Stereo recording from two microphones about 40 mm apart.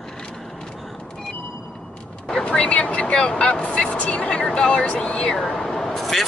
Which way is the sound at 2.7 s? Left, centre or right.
Left.